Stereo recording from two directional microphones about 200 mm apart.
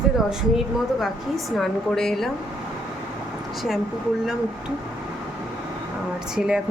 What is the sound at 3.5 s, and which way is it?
A woman's voice, centre (ahead or behind).